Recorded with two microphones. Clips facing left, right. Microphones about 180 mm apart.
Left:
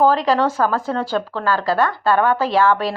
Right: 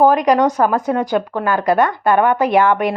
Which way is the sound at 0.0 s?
15° right (ahead or behind).